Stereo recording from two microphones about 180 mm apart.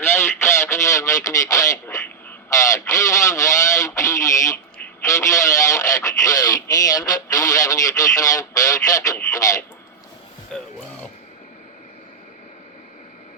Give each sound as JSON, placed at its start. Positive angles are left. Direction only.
{"t": 0.0, "sound": "radio", "side_deg": 15}
{"t": 2.5, "sound": "speech", "side_deg": 20}
{"t": 10.5, "sound": "speech", "side_deg": 5}